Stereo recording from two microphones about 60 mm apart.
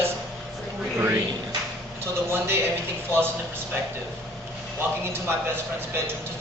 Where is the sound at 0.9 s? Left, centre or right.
Right.